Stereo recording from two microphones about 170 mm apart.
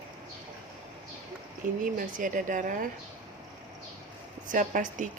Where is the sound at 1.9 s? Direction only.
50° right (ahead or behind).